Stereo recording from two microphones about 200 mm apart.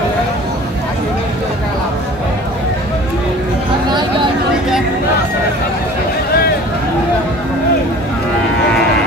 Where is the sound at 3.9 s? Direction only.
20° right (ahead or behind).